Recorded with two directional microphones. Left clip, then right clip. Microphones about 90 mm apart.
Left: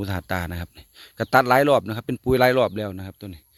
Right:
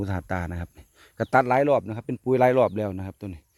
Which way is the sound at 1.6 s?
75° left (ahead or behind).